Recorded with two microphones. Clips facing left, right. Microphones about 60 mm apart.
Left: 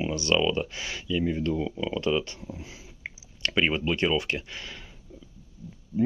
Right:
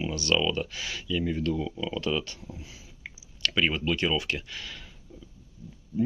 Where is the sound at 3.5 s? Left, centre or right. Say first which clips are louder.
Left 2 dB; centre.